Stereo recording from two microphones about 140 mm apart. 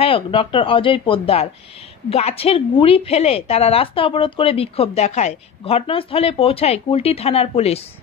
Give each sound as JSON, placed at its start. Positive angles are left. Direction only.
{"t": 0.0, "sound": "a woman's voice", "side_deg": 40}